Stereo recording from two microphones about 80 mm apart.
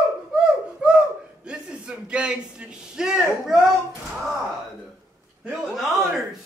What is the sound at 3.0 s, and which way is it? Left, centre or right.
Speech, centre.